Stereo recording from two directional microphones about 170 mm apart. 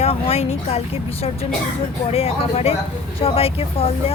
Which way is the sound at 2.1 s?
35° left (ahead or behind).